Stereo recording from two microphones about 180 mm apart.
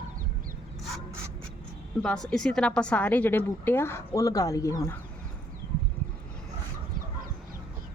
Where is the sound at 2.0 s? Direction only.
5° left (ahead or behind).